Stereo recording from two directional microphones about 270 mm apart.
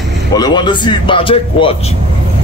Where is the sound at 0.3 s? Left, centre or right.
Centre.